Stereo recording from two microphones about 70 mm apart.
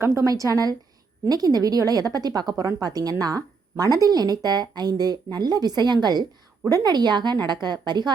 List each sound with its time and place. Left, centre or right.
0.0 s a woman's voice: right
6.7 s a woman's voice: right